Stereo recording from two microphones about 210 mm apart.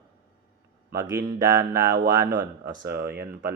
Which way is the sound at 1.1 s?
15° right (ahead or behind).